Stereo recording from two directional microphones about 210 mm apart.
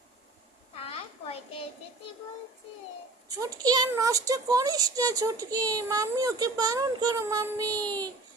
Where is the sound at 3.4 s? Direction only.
15° right (ahead or behind).